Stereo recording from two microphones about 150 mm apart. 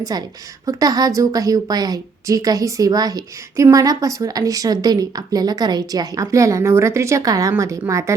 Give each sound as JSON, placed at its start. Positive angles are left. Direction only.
{"t": 0.0, "sound": "a woman's voice", "side_deg": -25}